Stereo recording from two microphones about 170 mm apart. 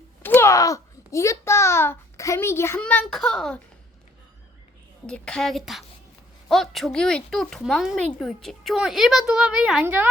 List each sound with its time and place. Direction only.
0.2 s a child's voice: 15° left (ahead or behind)
5.0 s a woman's voice: 5° left (ahead or behind); by 10.1 s 10° right (ahead or behind)